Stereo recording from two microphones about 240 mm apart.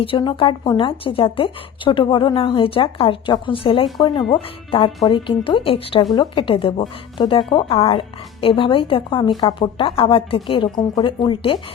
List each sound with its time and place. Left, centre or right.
0.0 s a woman's voice: left